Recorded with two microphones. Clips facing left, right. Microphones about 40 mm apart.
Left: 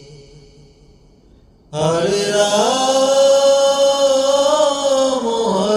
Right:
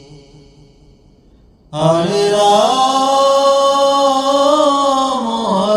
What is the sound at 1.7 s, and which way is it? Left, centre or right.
Mantra, right.